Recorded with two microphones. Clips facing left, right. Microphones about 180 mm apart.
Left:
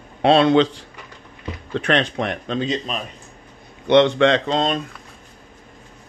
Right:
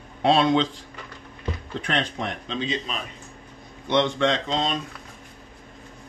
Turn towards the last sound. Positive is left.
turn(degrees=60)  # may be behind; listen again after turning